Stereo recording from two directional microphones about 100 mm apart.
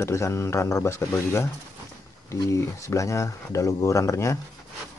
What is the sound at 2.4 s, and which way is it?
Speech, 30° left (ahead or behind).